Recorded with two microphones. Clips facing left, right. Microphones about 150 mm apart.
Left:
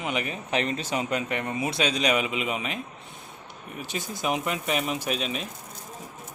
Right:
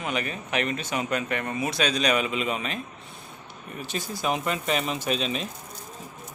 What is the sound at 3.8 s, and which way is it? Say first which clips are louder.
Speech: right 1 dB; 15° left (ahead or behind).